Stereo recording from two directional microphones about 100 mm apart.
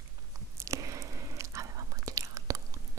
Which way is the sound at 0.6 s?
30° right (ahead or behind).